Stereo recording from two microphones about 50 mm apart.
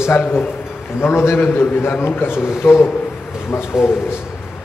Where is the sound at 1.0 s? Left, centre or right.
Left.